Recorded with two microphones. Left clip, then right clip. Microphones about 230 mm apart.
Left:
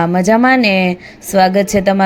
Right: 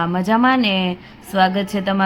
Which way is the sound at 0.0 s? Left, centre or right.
Left.